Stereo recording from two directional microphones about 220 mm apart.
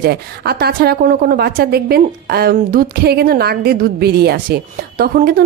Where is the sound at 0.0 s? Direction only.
45° right (ahead or behind).